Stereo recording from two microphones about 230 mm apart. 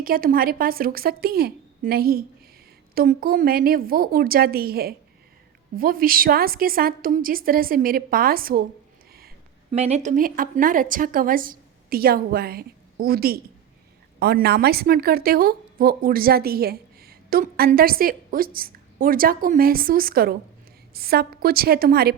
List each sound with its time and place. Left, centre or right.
0.0 s a woman's voice: right
9.7 s a woman's voice: right